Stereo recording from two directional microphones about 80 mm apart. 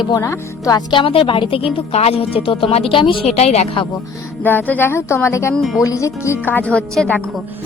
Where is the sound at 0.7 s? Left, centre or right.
Left.